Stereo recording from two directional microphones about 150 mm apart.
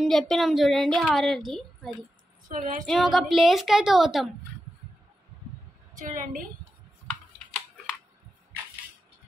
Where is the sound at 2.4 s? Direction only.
60° right (ahead or behind).